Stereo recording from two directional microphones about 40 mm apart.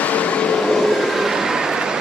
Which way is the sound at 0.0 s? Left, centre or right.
Left.